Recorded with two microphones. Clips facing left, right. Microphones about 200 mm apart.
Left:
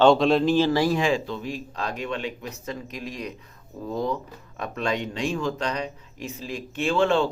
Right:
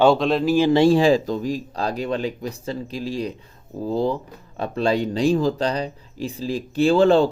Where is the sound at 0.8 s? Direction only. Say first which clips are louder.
Right 7 dB; 30° right (ahead or behind).